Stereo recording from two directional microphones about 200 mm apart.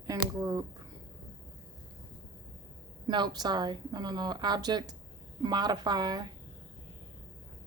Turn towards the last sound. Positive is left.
turn(degrees=-20)  # may be behind; listen again after turning